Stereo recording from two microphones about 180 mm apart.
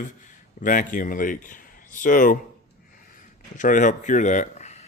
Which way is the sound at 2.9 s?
50° left (ahead or behind).